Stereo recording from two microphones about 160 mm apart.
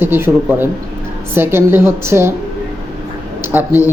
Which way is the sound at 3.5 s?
15° right (ahead or behind).